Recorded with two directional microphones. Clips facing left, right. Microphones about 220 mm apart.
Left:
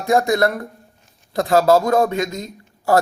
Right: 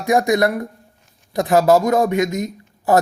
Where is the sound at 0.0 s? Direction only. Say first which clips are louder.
Right 1 dB; 15° right (ahead or behind).